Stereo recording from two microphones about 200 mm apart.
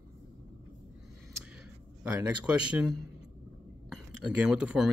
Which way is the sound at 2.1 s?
5° right (ahead or behind).